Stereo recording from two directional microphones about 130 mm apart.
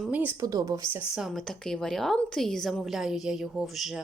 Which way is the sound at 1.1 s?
Centre (ahead or behind).